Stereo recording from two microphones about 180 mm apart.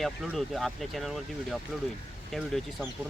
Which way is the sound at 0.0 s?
Centre (ahead or behind).